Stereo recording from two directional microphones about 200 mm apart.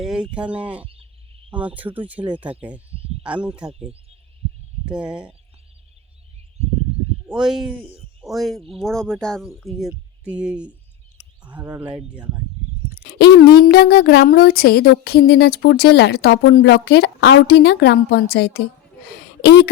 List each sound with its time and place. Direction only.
0.0 s speech: 5° right (ahead or behind)
0.9 s frog: 30° right (ahead or behind)
1.5 s speech: 5° right (ahead or behind)
4.9 s speech: 5° right (ahead or behind)
7.3 s speech: 5° right (ahead or behind)
13.0 s speech: 60° left (ahead or behind)